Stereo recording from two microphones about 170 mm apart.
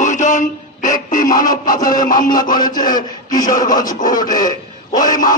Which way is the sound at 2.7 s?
25° left (ahead or behind).